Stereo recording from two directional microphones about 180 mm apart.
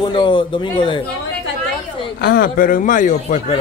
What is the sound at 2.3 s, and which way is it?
Speech, 55° left (ahead or behind).